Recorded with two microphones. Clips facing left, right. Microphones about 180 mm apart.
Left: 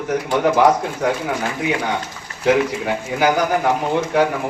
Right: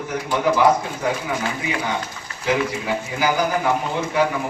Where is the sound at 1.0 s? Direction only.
65° left (ahead or behind).